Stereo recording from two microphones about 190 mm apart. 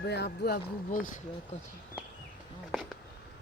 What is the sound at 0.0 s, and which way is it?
Speech, 60° left (ahead or behind).